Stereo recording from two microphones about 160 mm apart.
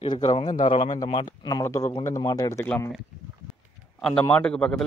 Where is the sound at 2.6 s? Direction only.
10° left (ahead or behind).